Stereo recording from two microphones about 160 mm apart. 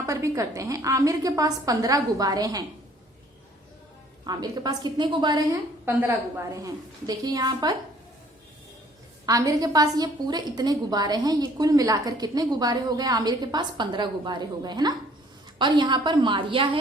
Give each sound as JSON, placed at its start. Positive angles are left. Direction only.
{"t": 0.0, "sound": "a woman's voice", "side_deg": -20}
{"t": 4.3, "sound": "a woman's voice", "side_deg": -25}
{"t": 5.8, "sound": "a woman's voice", "side_deg": -15}
{"t": 9.2, "sound": "a woman's voice", "side_deg": -20}